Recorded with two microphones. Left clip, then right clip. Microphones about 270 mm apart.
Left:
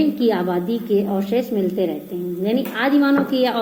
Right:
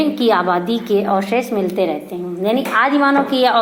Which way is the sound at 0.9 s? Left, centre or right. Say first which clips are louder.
Right 5 dB; right.